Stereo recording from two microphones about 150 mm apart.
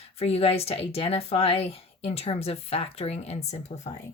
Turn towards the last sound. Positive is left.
turn(degrees=50)  # may be behind; listen again after turning